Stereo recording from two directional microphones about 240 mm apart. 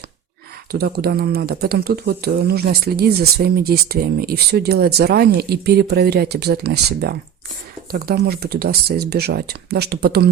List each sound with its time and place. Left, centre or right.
0.7 s speech: right